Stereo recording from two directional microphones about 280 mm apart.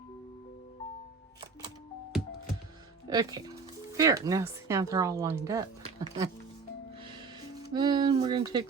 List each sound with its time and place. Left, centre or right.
3.1 s speech: centre
7.7 s speech: centre